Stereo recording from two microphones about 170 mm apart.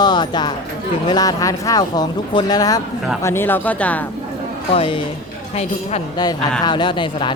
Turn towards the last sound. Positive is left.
turn(degrees=30)  # may be behind; listen again after turning